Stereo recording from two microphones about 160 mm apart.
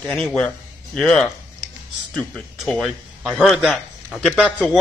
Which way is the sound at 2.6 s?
Centre (ahead or behind).